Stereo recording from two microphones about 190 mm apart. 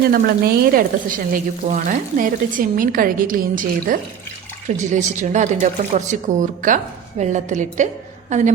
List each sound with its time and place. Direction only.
0.1 s speech: 50° right (ahead or behind)